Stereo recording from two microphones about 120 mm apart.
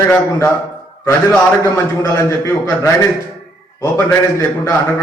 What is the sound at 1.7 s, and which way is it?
Speech, 25° left (ahead or behind).